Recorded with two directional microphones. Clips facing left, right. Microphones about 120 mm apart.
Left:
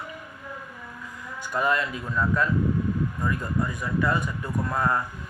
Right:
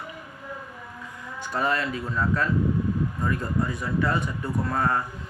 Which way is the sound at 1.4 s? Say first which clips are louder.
Even; 30° right (ahead or behind).